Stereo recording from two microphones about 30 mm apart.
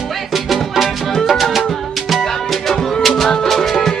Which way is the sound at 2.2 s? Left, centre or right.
Centre.